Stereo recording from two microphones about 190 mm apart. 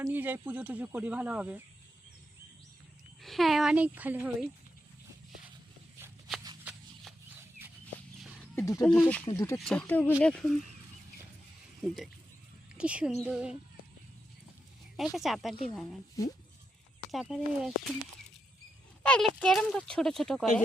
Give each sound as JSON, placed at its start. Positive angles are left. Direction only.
{"t": 0.0, "sound": "speech", "side_deg": -10}
{"t": 3.2, "sound": "speech", "side_deg": 0}
{"t": 8.5, "sound": "speech", "side_deg": 15}
{"t": 9.2, "sound": "speech", "side_deg": 20}
{"t": 9.6, "sound": "speech", "side_deg": 5}
{"t": 12.7, "sound": "a woman's voice", "side_deg": -5}
{"t": 14.9, "sound": "speech", "side_deg": 0}
{"t": 17.1, "sound": "speech", "side_deg": 0}
{"t": 19.0, "sound": "speech", "side_deg": 5}